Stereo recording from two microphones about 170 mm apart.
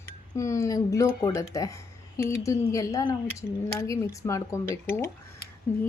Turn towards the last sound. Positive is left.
turn(degrees=10)  # may be behind; listen again after turning